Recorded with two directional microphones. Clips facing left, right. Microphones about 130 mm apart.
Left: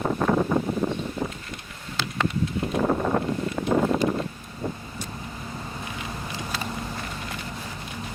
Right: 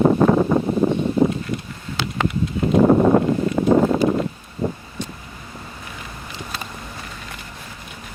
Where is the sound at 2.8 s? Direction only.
35° right (ahead or behind).